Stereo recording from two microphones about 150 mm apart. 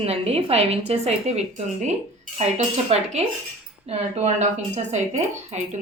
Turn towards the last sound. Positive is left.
turn(degrees=-50)  # may be behind; listen again after turning